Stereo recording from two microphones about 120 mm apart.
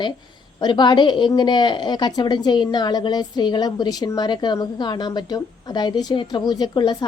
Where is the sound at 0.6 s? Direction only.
40° left (ahead or behind).